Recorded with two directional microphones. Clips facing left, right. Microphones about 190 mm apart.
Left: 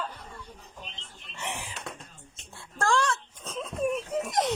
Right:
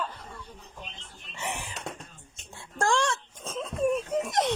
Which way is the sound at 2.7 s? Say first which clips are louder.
Even; 20° right (ahead or behind).